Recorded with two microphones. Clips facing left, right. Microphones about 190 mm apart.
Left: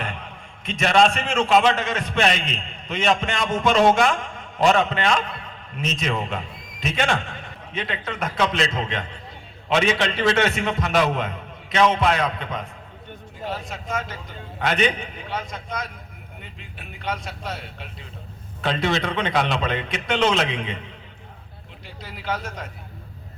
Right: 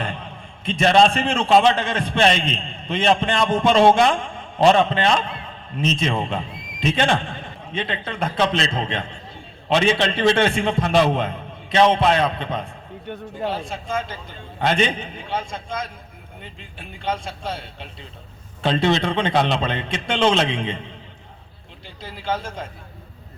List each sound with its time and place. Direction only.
0.0 s a man's voice: 30° right (ahead or behind)
13.1 s a man's voice: 70° right (ahead or behind)
13.5 s a man's voice: 30° right (ahead or behind)